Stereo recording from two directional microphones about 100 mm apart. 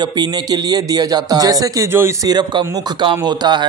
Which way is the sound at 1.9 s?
25° right (ahead or behind).